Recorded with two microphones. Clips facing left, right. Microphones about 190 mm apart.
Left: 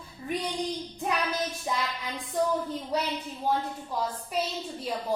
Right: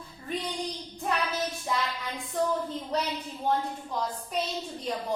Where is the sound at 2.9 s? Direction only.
10° left (ahead or behind).